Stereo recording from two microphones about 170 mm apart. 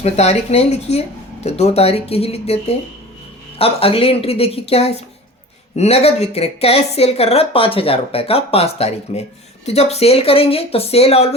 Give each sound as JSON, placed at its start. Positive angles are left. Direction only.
{"t": 0.0, "sound": "speech", "side_deg": 40}